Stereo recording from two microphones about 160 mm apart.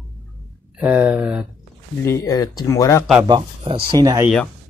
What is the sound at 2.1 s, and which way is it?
Speech, 20° left (ahead or behind).